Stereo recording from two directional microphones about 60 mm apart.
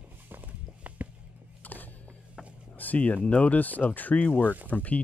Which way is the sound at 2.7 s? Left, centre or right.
Left.